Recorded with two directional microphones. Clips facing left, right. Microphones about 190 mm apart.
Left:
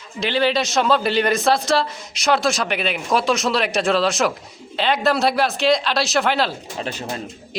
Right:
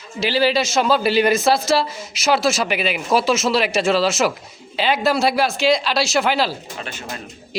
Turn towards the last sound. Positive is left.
turn(degrees=35)  # may be behind; listen again after turning